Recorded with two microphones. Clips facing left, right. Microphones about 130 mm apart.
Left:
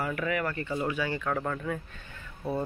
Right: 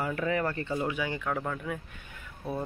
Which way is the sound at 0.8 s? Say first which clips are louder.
Left 1 dB; 15° right (ahead or behind).